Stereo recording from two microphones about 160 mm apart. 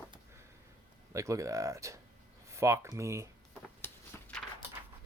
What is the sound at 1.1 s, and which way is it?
Speech, 20° right (ahead or behind).